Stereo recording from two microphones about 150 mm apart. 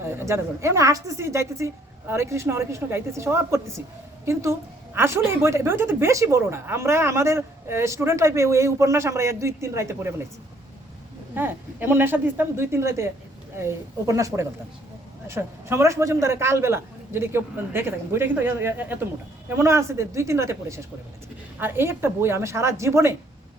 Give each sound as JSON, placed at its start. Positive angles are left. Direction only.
{"t": 0.2, "sound": "a woman's voice", "side_deg": -20}
{"t": 11.3, "sound": "a man's voice", "side_deg": -15}
{"t": 14.1, "sound": "a woman's voice", "side_deg": -20}